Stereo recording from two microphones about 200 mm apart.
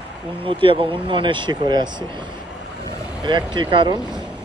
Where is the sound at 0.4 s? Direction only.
25° right (ahead or behind).